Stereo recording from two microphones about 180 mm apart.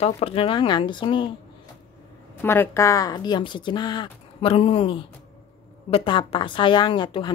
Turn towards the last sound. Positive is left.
turn(degrees=25)  # may be behind; listen again after turning